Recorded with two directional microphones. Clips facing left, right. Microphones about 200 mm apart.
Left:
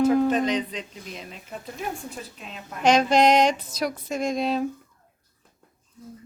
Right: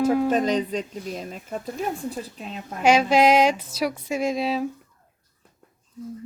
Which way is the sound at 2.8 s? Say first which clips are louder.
Right 1 dB; 5° right (ahead or behind).